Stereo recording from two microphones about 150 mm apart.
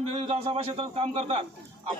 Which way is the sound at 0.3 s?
40° right (ahead or behind).